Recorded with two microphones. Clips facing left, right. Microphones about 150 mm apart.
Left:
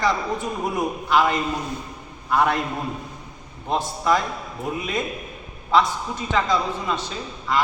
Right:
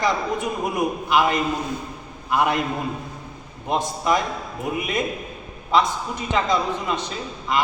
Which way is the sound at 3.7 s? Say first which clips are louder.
Even; 15° right (ahead or behind).